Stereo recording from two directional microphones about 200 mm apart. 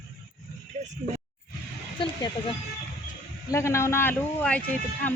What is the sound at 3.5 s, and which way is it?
A man's voice, 15° left (ahead or behind).